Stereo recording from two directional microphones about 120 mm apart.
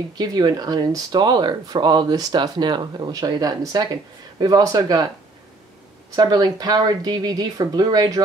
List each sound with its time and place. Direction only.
0.2 s speech: 30° right (ahead or behind)
6.1 s speech: 35° right (ahead or behind)